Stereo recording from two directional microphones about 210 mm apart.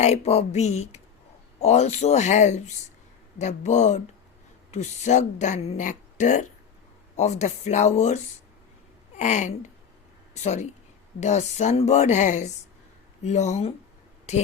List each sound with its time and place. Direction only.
0.0 s speech: 30° left (ahead or behind)